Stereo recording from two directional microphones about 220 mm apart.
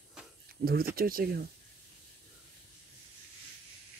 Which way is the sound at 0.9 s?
40° right (ahead or behind).